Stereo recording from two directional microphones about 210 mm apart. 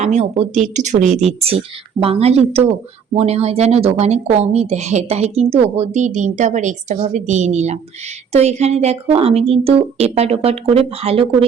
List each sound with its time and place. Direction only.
0.0 s a woman's voice: 30° right (ahead or behind)